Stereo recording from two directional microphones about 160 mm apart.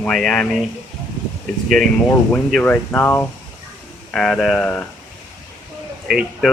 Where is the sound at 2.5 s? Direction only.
10° left (ahead or behind).